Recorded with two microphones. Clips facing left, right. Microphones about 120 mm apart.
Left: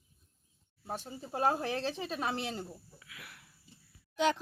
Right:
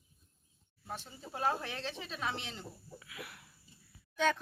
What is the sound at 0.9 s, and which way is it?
Speech, 40° left (ahead or behind).